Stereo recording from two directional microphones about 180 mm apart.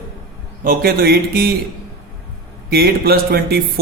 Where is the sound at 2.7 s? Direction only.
60° right (ahead or behind).